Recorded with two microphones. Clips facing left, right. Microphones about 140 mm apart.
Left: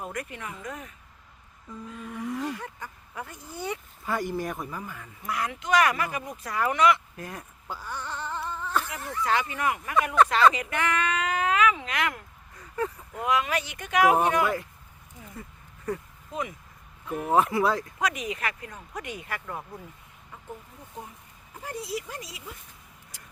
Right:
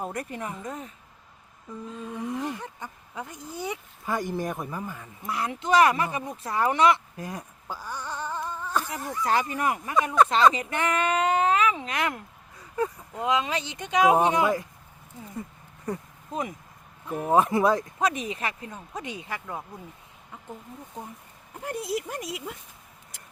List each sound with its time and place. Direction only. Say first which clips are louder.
0.0 s speech: right 3 dB; 35° right (ahead or behind)
1.9 s speech: right 1 dB; 20° right (ahead or behind)
7.2 s a sound: right 3 dB; 15° right (ahead or behind)
9.0 s speech: right 1 dB; 15° right (ahead or behind)
9.2 s speech: right 1 dB; 40° right (ahead or behind)
10.2 s speech: right 1 dB; 25° right (ahead or behind)
12.5 s speech: right 2 dB; 15° right (ahead or behind)
15.9 s speech: left 1 dB; 20° right (ahead or behind)
16.3 s speech: right 2 dB; 40° right (ahead or behind)
17.1 s speech: right 2 dB; 20° right (ahead or behind)
21.6 s speech: right 4 dB; 55° right (ahead or behind)